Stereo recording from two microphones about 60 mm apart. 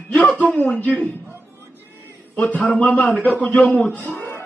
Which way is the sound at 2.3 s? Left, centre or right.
Left.